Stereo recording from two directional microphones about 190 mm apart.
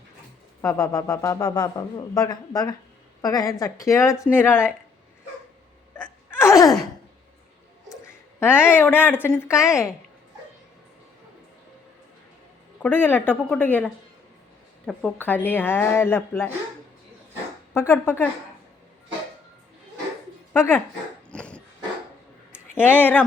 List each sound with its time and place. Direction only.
0.6 s a man's voice: 15° left (ahead or behind)
6.0 s hiccup: 10° left (ahead or behind)
8.0 s a man's voice: 10° left (ahead or behind)
12.8 s speech: 10° left (ahead or behind)
17.7 s speech: 10° left (ahead or behind)
20.5 s speech: 10° left (ahead or behind)
21.2 s dog: 5° left (ahead or behind)
22.8 s speech: 10° left (ahead or behind)